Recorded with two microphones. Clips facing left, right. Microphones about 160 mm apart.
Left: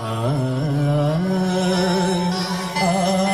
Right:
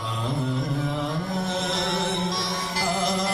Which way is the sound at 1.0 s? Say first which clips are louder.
Left 8 dB; 60° left (ahead or behind).